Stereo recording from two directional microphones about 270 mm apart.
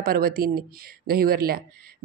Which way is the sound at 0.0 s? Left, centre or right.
Right.